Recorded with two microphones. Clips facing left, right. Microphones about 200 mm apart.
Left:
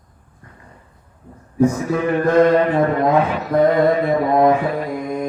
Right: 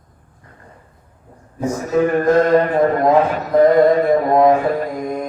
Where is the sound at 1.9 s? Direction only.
45° right (ahead or behind).